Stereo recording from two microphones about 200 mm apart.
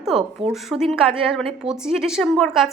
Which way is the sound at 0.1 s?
25° right (ahead or behind).